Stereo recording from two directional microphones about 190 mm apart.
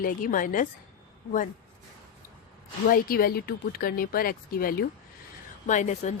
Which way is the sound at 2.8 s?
50° left (ahead or behind).